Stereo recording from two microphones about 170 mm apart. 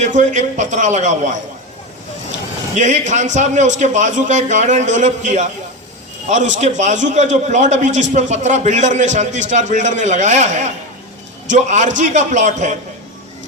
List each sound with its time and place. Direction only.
0.0 s a man's voice: 45° right (ahead or behind)
2.7 s a man's voice: 45° right (ahead or behind)